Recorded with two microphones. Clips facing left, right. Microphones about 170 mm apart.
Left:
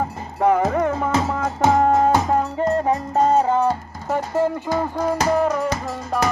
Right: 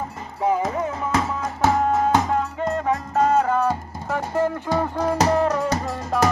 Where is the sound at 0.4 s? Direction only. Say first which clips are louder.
Left 4 dB; 65° left (ahead or behind).